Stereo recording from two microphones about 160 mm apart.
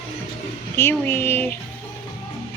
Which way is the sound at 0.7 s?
15° left (ahead or behind).